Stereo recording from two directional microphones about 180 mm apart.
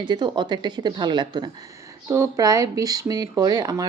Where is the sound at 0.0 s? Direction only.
25° right (ahead or behind).